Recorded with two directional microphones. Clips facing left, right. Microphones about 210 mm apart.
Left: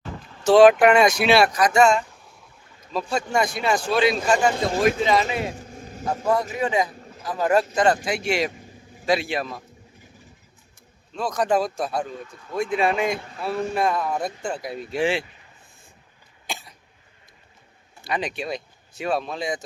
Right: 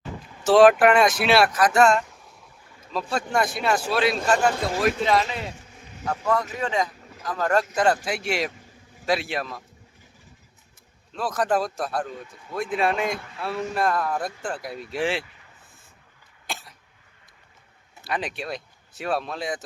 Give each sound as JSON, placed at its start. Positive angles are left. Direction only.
{"t": 0.3, "sound": "vehicle", "side_deg": -10}
{"t": 0.5, "sound": "a man's voice", "side_deg": 0}
{"t": 5.5, "sound": "a sound", "side_deg": 40}
{"t": 6.6, "sound": "speech", "side_deg": 10}
{"t": 8.0, "sound": "a man's voice", "side_deg": -5}
{"t": 11.1, "sound": "a man's voice", "side_deg": -5}
{"t": 16.5, "sound": "cough", "side_deg": 0}
{"t": 18.0, "sound": "speech", "side_deg": -5}